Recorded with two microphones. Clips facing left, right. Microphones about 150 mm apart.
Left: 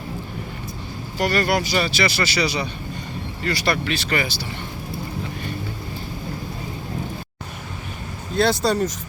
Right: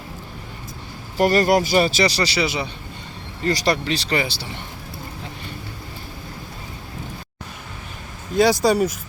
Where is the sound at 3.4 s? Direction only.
35° right (ahead or behind).